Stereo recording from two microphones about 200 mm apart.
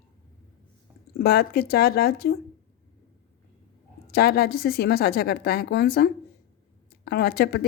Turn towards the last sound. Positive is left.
turn(degrees=55)  # may be behind; listen again after turning